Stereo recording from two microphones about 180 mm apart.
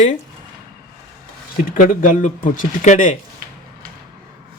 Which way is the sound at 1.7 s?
50° left (ahead or behind).